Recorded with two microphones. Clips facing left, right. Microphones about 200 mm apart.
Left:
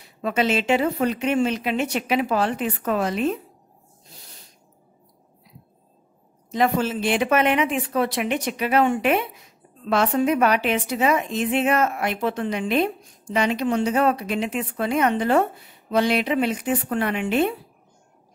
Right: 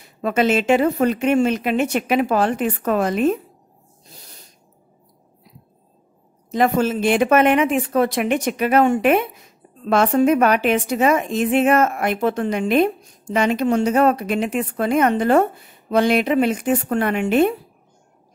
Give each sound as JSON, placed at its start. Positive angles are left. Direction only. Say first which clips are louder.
{"t": 0.2, "sound": "a woman's voice", "louder": "right 4 dB", "side_deg": -50}
{"t": 6.5, "sound": "a woman's voice", "louder": "right 4 dB", "side_deg": -45}